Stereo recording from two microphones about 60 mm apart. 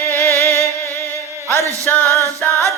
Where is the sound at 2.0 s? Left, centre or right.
Left.